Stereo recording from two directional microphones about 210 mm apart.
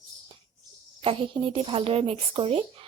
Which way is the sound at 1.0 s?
25° right (ahead or behind).